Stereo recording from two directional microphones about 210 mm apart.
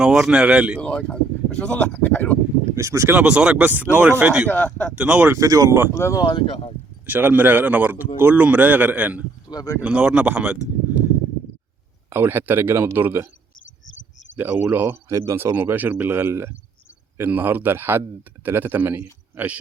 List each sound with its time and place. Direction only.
0.0 s speech: 5° right (ahead or behind)
0.8 s speech: 5° left (ahead or behind)
2.7 s speech: 15° right (ahead or behind)
4.4 s speech: 10° left (ahead or behind)
4.9 s speech: 5° right (ahead or behind)
5.9 s speech: 15° left (ahead or behind)
7.0 s speech: 10° right (ahead or behind)
9.5 s speech: 15° left (ahead or behind)
9.8 s speech: 5° right (ahead or behind)
12.1 s speech: 10° right (ahead or behind)
14.3 s speech: 10° right (ahead or behind)